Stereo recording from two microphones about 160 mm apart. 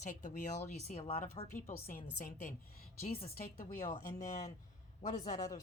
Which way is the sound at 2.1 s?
50° left (ahead or behind).